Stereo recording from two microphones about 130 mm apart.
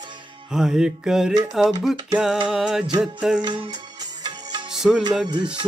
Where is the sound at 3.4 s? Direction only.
40° right (ahead or behind).